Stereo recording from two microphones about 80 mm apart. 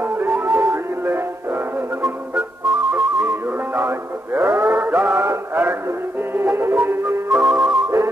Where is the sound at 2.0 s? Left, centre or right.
Centre; by 7.3 s right.